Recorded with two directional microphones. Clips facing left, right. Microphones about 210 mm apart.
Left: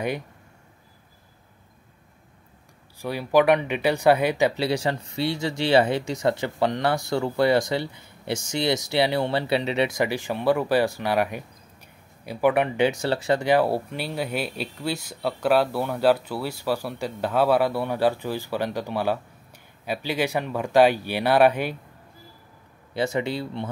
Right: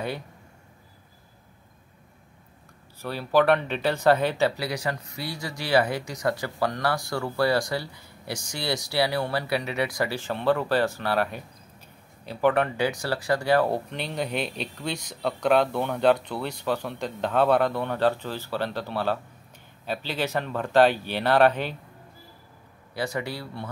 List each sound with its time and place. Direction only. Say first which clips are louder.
3.0 s speech: left 2 dB; 15° left (ahead or behind)
4.6 s speech: left 5 dB; 25° left (ahead or behind); by 21.7 s 10° left (ahead or behind)
22.9 s speech: left 5 dB; 25° left (ahead or behind)